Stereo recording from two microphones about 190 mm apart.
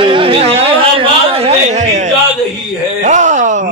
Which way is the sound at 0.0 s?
25° right (ahead or behind).